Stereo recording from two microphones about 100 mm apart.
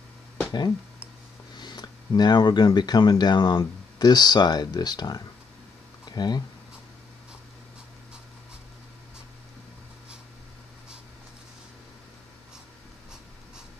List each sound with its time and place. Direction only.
0.5 s speech: 40° left (ahead or behind)